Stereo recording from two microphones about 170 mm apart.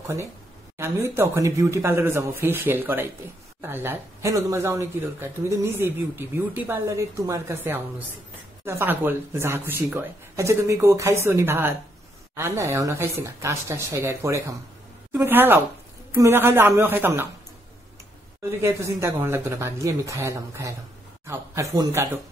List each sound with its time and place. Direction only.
0.7 s speech: 15° right (ahead or behind)
18.6 s speech: 15° right (ahead or behind)